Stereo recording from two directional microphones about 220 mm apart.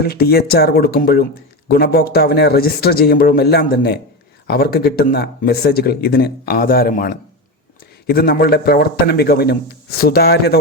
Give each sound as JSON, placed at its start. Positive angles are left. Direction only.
{"t": 0.0, "sound": "speech", "side_deg": 45}